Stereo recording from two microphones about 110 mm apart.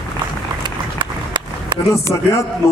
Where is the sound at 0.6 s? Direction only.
45° right (ahead or behind).